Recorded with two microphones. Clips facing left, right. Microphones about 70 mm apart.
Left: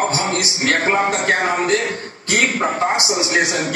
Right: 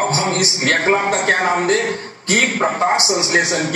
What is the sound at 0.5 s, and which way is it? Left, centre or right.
A man's voice, right.